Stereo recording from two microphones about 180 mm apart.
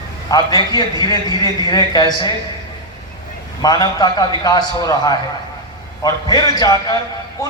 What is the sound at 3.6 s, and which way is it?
A man's voice, 20° left (ahead or behind).